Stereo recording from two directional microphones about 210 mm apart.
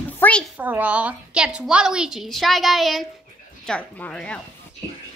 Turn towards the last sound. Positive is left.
turn(degrees=5)  # may be behind; listen again after turning